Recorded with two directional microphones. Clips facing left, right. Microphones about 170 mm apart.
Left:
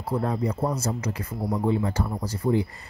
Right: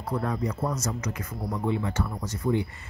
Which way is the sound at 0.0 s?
30° left (ahead or behind).